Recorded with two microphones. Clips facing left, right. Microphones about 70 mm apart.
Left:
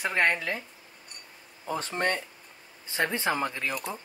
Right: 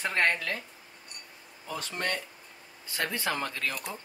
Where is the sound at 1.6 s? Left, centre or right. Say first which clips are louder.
Left 5 dB; left.